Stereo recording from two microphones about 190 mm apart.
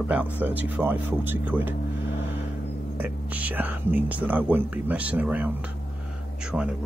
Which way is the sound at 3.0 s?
10° right (ahead or behind).